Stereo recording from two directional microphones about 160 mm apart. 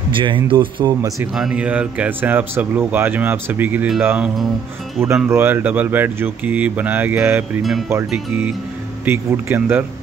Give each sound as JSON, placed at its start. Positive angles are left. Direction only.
{"t": 0.1, "sound": "speech", "side_deg": -30}
{"t": 1.2, "sound": "speech", "side_deg": -5}
{"t": 9.0, "sound": "speech", "side_deg": -15}